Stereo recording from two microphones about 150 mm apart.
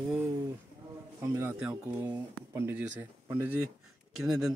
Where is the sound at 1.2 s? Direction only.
20° right (ahead or behind).